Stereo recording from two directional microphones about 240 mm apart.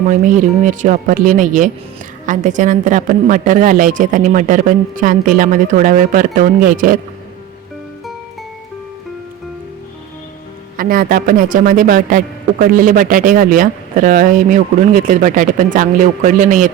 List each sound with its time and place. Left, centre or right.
0.1 s speech: right
10.8 s speech: right